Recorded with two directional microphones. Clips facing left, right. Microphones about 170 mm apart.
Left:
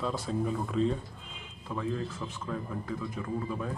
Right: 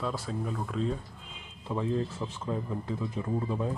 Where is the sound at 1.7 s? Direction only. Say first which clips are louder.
Right 3 dB; 25° right (ahead or behind).